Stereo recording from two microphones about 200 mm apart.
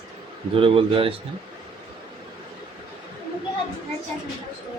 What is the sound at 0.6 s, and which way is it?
Speech, 25° right (ahead or behind).